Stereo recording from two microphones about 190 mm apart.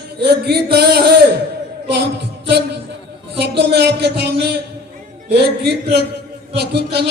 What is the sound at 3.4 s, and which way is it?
Speech, 60° right (ahead or behind).